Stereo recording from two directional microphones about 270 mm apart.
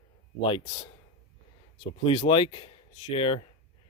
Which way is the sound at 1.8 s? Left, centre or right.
Centre.